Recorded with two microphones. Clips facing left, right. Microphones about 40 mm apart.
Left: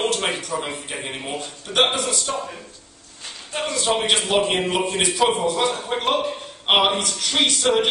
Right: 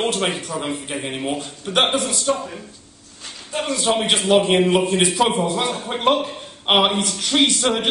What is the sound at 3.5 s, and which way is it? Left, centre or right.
A man's voice, centre.